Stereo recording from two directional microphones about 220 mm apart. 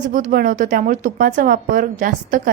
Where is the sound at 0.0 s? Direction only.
35° right (ahead or behind).